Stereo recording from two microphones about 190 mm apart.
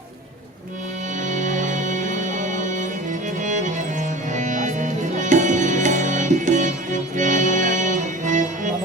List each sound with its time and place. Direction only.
1.3 s music: 40° right (ahead or behind)